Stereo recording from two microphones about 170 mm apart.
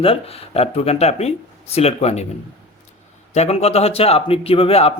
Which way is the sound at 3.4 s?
40° left (ahead or behind).